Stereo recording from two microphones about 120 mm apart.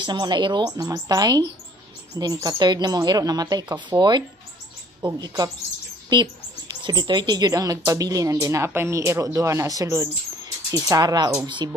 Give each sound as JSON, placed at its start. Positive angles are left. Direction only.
{"t": 0.0, "sound": "speech", "side_deg": -40}
{"t": 2.4, "sound": "speech", "side_deg": -35}
{"t": 6.7, "sound": "speech", "side_deg": -35}
{"t": 11.4, "sound": "speech", "side_deg": -40}